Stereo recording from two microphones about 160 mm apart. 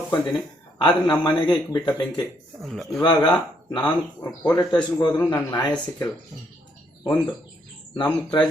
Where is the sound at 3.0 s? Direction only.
25° left (ahead or behind).